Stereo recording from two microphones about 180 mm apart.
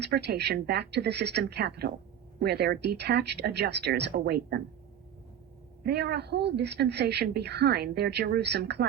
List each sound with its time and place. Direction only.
0.0 s a woman's voice: 65° right (ahead or behind)
5.8 s a woman's voice: 65° right (ahead or behind)